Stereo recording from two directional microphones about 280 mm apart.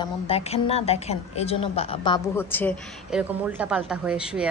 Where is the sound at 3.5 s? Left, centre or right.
Centre.